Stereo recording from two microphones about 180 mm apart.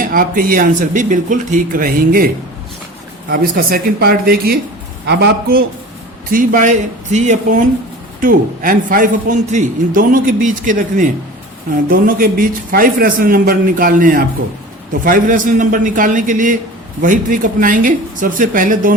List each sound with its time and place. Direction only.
0.1 s a man's voice: 50° right (ahead or behind)
6.3 s a man's voice: 45° right (ahead or behind)